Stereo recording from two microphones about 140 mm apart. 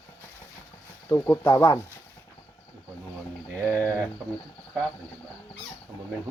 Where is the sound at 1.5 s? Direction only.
25° left (ahead or behind).